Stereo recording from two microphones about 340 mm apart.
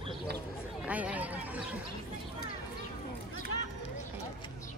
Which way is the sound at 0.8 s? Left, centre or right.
Centre.